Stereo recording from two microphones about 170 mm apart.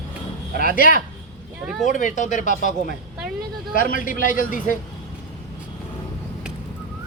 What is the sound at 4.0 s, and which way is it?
Speech, 50° left (ahead or behind).